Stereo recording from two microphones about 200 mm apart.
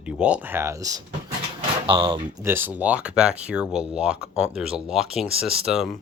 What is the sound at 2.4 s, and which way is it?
Speech, 10° right (ahead or behind).